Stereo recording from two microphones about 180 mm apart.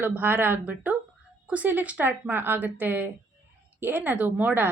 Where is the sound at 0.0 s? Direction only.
10° right (ahead or behind).